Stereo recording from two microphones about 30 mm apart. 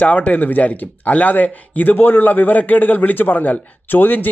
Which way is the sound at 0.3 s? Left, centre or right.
Left.